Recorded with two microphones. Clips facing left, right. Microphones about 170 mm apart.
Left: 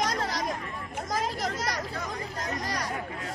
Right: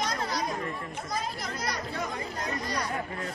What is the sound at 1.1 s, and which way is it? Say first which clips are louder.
Speech: left 5 dB; 90° left.